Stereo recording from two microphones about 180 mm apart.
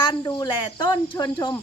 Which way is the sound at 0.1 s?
25° left (ahead or behind).